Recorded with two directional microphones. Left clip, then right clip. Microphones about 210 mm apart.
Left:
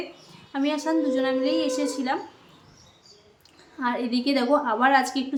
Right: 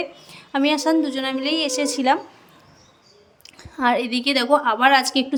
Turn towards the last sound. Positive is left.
turn(degrees=-40)  # may be behind; listen again after turning